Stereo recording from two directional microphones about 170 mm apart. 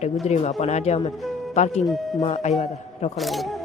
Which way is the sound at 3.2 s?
Centre (ahead or behind).